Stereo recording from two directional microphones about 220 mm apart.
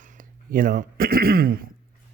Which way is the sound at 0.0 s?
35° right (ahead or behind).